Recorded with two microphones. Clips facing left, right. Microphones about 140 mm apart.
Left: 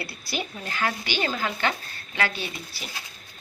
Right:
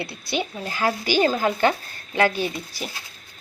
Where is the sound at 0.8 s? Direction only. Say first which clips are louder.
Right 7 dB; 40° right (ahead or behind).